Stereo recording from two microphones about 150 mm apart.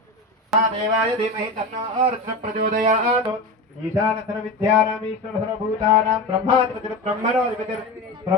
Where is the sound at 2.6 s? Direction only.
50° right (ahead or behind).